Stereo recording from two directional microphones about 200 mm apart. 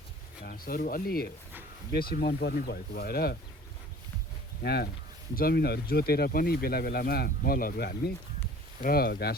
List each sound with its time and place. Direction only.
0.4 s speech: 45° left (ahead or behind)
4.6 s speech: 55° left (ahead or behind)